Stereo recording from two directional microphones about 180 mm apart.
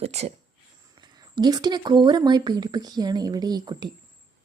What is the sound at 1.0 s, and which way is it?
Speech, 25° right (ahead or behind).